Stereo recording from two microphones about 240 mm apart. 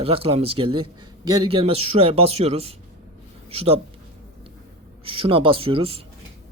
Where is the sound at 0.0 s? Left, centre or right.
Right.